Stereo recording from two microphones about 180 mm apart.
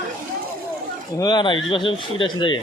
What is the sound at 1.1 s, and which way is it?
Speech, 25° left (ahead or behind).